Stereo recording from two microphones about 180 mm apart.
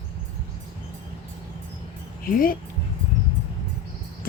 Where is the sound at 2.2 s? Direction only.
50° left (ahead or behind).